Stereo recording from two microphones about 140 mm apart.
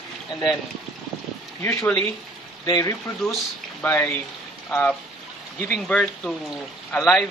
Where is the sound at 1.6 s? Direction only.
10° left (ahead or behind).